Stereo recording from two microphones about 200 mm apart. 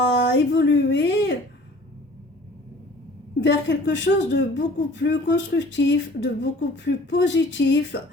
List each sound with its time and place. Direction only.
0.0 s speech: 60° left (ahead or behind)
3.4 s speech: 60° left (ahead or behind)